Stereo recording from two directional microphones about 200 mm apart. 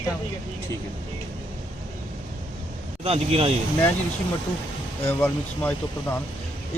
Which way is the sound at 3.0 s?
30° right (ahead or behind).